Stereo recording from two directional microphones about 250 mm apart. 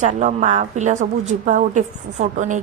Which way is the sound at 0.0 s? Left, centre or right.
Right.